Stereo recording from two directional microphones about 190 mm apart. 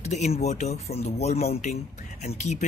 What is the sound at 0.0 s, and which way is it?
Speech, 35° left (ahead or behind).